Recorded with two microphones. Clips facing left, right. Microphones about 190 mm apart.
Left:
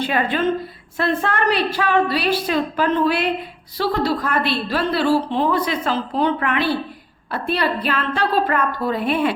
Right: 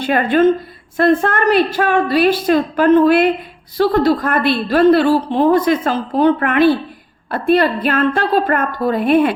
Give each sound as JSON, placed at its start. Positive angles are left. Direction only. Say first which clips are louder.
{"t": 0.0, "sound": "a woman's voice", "louder": "right 7 dB", "side_deg": -50}